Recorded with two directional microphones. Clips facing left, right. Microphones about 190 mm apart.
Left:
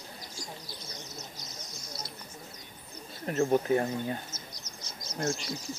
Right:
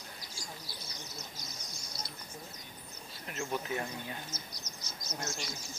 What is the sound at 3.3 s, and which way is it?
Speech, 40° left (ahead or behind).